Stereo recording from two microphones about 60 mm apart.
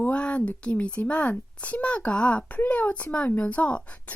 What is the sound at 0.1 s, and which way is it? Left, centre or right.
A woman's voice, centre.